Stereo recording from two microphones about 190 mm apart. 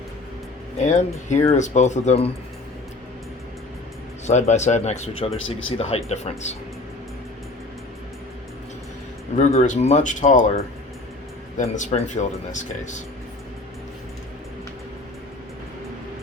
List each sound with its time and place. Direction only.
0.9 s speech: 40° left (ahead or behind)
4.3 s speech: 35° left (ahead or behind)
9.4 s speech: 35° left (ahead or behind)